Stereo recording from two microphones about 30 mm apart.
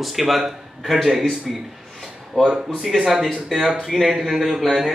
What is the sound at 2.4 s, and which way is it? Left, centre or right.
Speech, centre.